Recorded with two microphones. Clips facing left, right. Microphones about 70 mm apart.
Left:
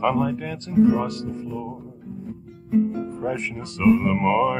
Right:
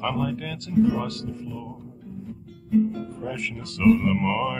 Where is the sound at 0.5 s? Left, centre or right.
Left.